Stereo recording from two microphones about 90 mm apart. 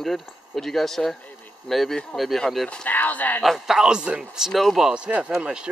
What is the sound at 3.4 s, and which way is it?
Speech, centre (ahead or behind).